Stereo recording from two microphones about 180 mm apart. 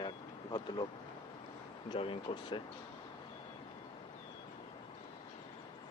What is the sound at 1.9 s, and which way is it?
Speech, 30° left (ahead or behind).